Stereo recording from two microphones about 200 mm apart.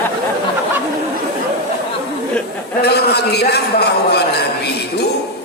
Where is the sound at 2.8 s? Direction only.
55° left (ahead or behind).